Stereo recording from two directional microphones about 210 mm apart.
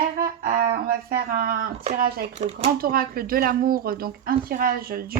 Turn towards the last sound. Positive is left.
turn(degrees=-45)  # may be behind; listen again after turning